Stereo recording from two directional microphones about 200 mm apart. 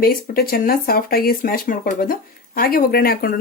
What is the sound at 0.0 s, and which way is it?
Speech, 45° left (ahead or behind).